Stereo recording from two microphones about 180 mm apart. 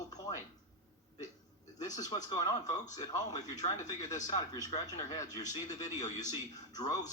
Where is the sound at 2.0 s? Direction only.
20° left (ahead or behind).